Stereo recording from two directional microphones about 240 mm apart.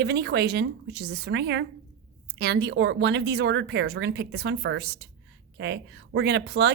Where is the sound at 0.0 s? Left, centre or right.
Right.